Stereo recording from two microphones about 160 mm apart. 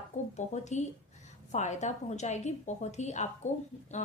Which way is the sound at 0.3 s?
45° left (ahead or behind).